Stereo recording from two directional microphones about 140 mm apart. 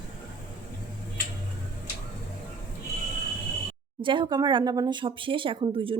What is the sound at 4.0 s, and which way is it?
Speech, 35° right (ahead or behind).